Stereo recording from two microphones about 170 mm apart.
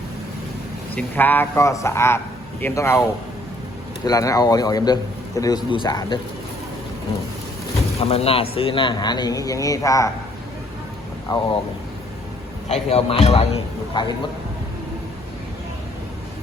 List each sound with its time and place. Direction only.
0.9 s a man's voice: 10° left (ahead or behind); by 6.1 s 25° left (ahead or behind)
8.0 s a man's voice: 35° left (ahead or behind); by 10.1 s 20° left (ahead or behind)
11.3 s a man's voice: 25° left (ahead or behind)
12.6 s a man's voice: 35° left (ahead or behind)